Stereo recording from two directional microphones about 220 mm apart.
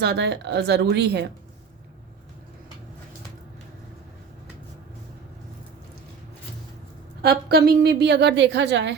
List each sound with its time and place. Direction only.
0.0 s a woman's voice: 50° right (ahead or behind)
7.2 s a woman's voice: 45° right (ahead or behind)